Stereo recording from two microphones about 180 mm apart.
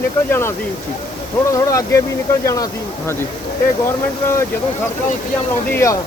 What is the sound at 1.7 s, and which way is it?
Speech, 15° left (ahead or behind).